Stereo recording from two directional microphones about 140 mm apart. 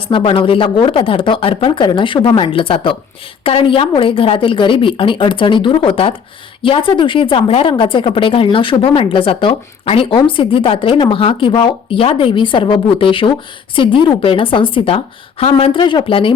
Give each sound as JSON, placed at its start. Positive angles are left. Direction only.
{"t": 0.1, "sound": "speech", "side_deg": 35}